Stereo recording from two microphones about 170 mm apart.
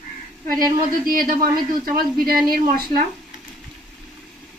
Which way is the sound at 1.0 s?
60° right (ahead or behind).